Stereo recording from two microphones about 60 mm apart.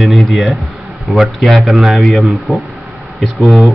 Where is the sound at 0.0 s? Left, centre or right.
Centre.